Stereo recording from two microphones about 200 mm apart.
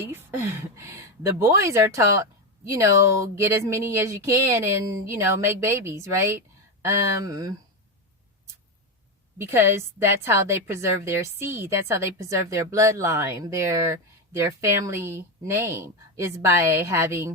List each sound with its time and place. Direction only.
0.0 s a woman's voice: 10° right (ahead or behind)
9.4 s a woman's voice: 10° right (ahead or behind)